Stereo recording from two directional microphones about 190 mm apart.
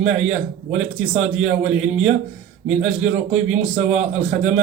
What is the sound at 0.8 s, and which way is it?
A man's voice, 35° right (ahead or behind).